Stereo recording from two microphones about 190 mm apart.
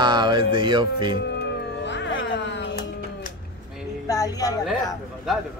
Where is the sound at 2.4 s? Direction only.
70° left (ahead or behind).